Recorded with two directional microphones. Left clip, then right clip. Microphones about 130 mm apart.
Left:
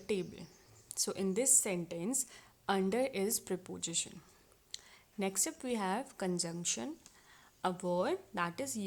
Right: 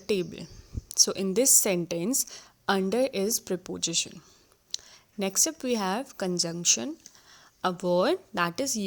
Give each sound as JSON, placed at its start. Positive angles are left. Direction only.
{"t": 0.1, "sound": "a woman's voice", "side_deg": -45}